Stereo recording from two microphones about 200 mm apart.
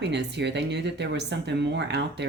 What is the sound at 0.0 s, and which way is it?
Speech, 60° right (ahead or behind).